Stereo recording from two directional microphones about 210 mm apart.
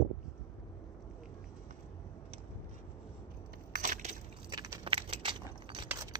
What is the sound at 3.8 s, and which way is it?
Crushing, 35° right (ahead or behind).